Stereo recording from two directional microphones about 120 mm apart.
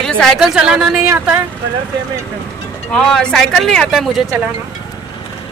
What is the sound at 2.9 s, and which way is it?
A woman's voice, 5° left (ahead or behind).